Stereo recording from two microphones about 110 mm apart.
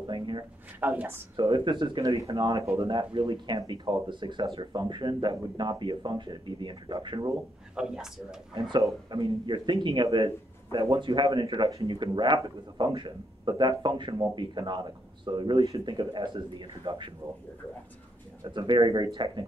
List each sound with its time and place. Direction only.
0.0 s a sound: 45° right (ahead or behind)
0.7 s speech: 15° right (ahead or behind)
1.5 s speech: 50° right (ahead or behind)
7.7 s speech: 5° right (ahead or behind)
8.5 s speech: 45° right (ahead or behind)
18.4 s speech: 45° right (ahead or behind)